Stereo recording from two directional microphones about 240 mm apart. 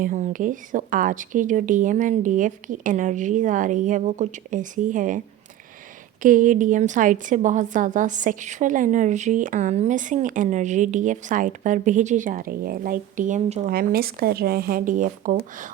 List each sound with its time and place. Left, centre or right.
0.0 s a woman's voice: right
6.2 s a woman's voice: right